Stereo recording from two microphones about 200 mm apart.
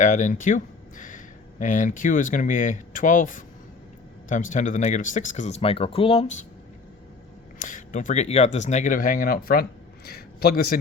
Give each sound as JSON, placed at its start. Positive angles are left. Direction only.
{"t": 0.0, "sound": "speech", "side_deg": 40}
{"t": 7.6, "sound": "a man's voice", "side_deg": 40}